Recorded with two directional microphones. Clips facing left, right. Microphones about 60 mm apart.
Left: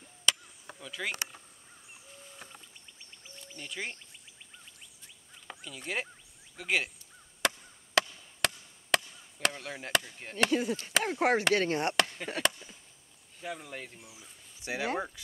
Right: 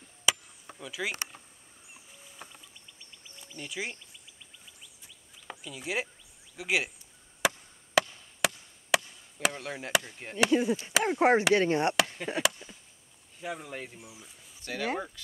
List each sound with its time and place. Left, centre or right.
0.2 s chop: centre
3.5 s speech: centre
5.5 s speech: centre
7.4 s chop: centre
10.1 s speech: centre
11.5 s chop: centre
13.4 s speech: centre
14.6 s speech: centre